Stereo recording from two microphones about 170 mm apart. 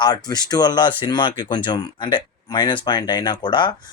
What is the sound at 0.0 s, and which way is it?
Speech, 25° left (ahead or behind).